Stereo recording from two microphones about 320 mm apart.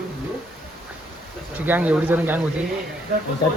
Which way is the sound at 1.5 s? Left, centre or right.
Centre.